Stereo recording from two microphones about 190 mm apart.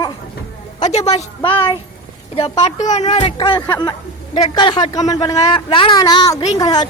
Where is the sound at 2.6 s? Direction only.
35° left (ahead or behind).